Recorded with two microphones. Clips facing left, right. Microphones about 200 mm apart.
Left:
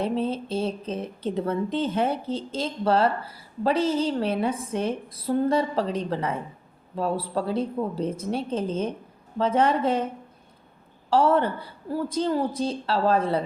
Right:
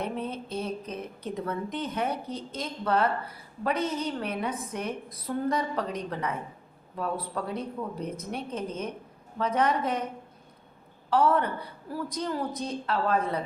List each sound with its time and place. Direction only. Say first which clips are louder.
0.0 s speech: left 7 dB; 30° left (ahead or behind)
11.1 s speech: left 3 dB; 30° left (ahead or behind)